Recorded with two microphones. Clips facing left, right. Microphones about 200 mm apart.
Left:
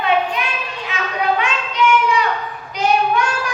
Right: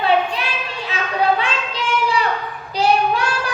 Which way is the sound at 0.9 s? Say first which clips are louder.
Right 1 dB; 35° right (ahead or behind).